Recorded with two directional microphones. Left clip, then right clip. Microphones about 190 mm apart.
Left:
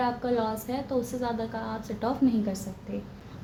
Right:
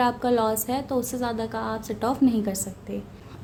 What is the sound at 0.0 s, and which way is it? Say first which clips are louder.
A woman's voice: right 5 dB; 45° right (ahead or behind).